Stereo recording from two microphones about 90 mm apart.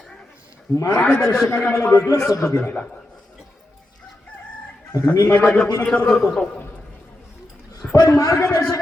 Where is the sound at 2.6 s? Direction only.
20° left (ahead or behind).